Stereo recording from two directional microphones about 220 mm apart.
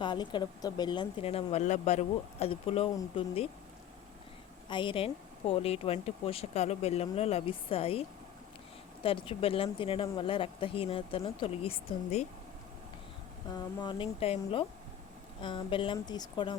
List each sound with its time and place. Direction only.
0.0 s speech: 20° left (ahead or behind)
4.7 s speech: 20° left (ahead or behind)
9.0 s speech: 25° left (ahead or behind)
13.5 s speech: 20° left (ahead or behind)